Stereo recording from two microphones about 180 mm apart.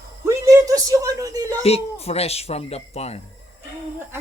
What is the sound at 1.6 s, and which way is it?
Speech, 35° left (ahead or behind).